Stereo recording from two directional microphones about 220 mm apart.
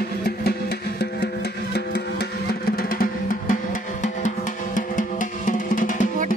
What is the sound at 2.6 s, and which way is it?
Drum, 40° left (ahead or behind).